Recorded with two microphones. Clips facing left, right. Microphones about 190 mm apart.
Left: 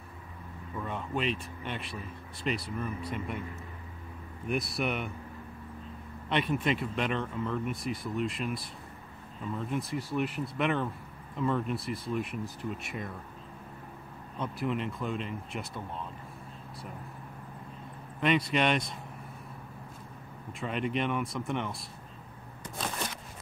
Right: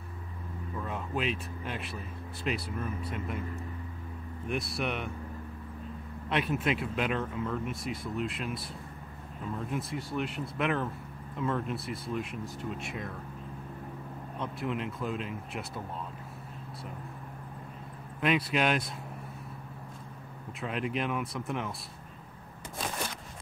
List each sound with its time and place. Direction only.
0.7 s speech: centre (ahead or behind)
4.5 s speech: centre (ahead or behind)
6.2 s speech: centre (ahead or behind)
14.4 s speech: centre (ahead or behind)
18.2 s speech: 5° right (ahead or behind)
20.6 s speech: centre (ahead or behind)